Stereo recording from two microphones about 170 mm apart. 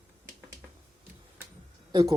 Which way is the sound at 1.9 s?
20° right (ahead or behind).